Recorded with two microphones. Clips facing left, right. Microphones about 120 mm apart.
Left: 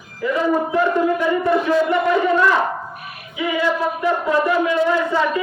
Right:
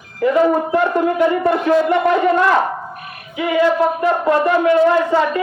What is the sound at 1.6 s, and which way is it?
Speech, 55° right (ahead or behind).